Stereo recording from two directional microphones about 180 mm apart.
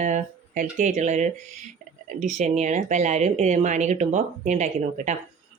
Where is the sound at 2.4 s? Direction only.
40° right (ahead or behind).